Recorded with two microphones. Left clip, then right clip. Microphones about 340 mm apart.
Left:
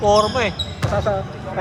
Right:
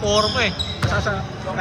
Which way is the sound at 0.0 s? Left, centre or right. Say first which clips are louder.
Left 3 dB; centre.